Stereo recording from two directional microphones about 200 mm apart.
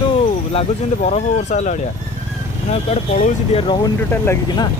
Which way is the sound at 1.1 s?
35° left (ahead or behind).